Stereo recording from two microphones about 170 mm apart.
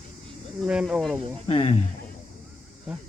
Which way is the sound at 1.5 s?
35° left (ahead or behind).